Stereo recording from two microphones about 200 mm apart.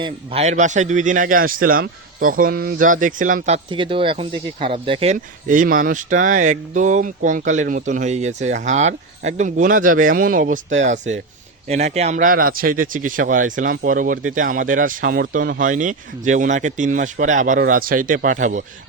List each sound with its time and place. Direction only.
0.0 s speech: 30° right (ahead or behind)
5.1 s speech: 40° right (ahead or behind)